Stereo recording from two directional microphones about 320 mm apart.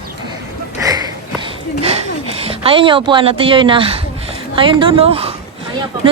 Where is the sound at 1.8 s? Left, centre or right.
Centre.